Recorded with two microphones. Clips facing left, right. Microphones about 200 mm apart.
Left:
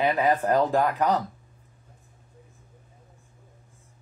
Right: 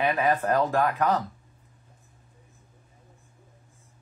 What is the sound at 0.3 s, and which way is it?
Speech, 25° left (ahead or behind).